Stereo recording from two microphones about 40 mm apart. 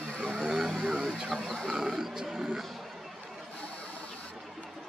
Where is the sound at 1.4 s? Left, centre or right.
Centre.